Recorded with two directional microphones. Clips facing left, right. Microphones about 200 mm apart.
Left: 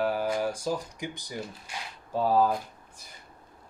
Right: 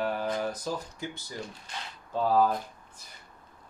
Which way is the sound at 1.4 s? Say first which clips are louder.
Left 1 dB; 5° left (ahead or behind).